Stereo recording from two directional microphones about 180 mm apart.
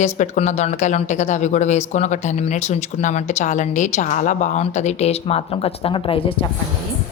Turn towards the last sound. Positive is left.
turn(degrees=30)  # may be behind; listen again after turning